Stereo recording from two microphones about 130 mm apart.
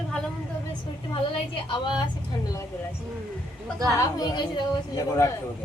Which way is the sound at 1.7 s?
35° left (ahead or behind).